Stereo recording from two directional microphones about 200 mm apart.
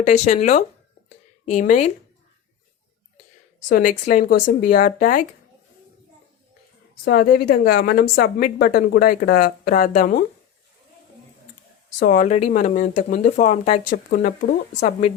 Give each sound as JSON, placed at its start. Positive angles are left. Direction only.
{"t": 0.0, "sound": "speech", "side_deg": 35}
{"t": 3.7, "sound": "speech", "side_deg": 40}
{"t": 7.0, "sound": "a woman's voice", "side_deg": 50}
{"t": 11.9, "sound": "a woman's voice", "side_deg": 45}